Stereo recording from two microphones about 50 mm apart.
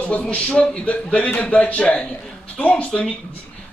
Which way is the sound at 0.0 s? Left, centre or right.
Left.